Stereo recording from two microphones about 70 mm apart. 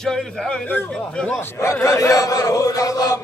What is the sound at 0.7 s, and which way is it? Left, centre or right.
Speech, left.